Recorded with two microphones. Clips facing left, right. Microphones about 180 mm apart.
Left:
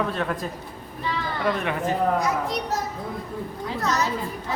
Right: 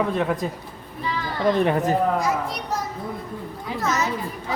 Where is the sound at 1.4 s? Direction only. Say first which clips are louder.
Right 6 dB; 35° right (ahead or behind).